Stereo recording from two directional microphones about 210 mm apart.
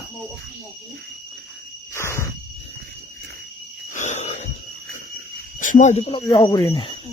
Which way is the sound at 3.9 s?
35° left (ahead or behind).